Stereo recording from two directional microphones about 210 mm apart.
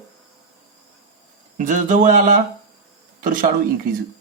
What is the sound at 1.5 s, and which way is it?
Speech, 35° right (ahead or behind).